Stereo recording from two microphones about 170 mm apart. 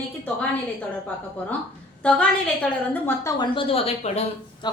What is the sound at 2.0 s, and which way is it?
A woman's voice, 5° left (ahead or behind).